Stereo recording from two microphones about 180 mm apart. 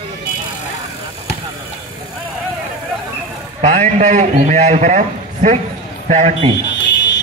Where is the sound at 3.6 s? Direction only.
40° right (ahead or behind).